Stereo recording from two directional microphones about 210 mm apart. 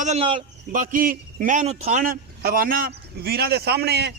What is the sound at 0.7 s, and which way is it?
A man's voice, 40° right (ahead or behind).